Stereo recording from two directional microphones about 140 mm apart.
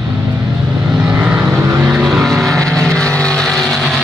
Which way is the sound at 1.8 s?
5° right (ahead or behind).